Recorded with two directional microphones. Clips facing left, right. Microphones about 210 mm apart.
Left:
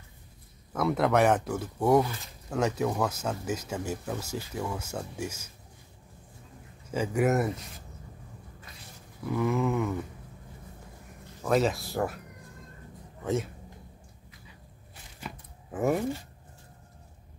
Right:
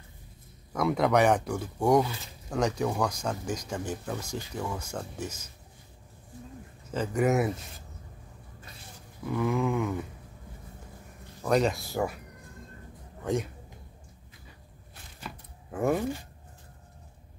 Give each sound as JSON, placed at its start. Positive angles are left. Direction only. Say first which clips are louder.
{"t": 0.7, "sound": "speech", "louder": "even", "side_deg": 0}
{"t": 6.9, "sound": "speech", "louder": "even", "side_deg": 10}
{"t": 9.3, "sound": "speech", "louder": "even", "side_deg": 5}
{"t": 11.4, "sound": "speech", "louder": "even", "side_deg": 0}
{"t": 13.2, "sound": "a man's voice", "louder": "even", "side_deg": 5}
{"t": 15.1, "sound": "a sound", "louder": "left 1 dB", "side_deg": 5}